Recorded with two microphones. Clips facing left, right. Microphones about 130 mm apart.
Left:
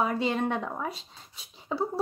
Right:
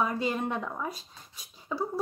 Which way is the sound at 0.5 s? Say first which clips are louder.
Left 2 dB; 25° left (ahead or behind).